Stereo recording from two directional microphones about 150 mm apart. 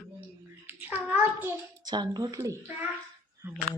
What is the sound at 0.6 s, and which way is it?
Speech, 10° right (ahead or behind).